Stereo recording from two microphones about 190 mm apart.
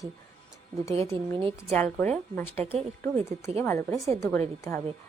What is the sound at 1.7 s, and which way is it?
Speech, 5° left (ahead or behind).